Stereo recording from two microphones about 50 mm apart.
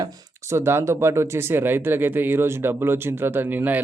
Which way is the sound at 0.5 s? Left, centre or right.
Right.